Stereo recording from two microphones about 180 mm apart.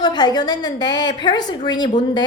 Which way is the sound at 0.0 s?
25° left (ahead or behind).